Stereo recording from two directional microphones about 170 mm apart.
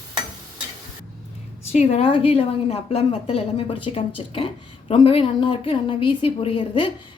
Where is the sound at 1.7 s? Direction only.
40° left (ahead or behind).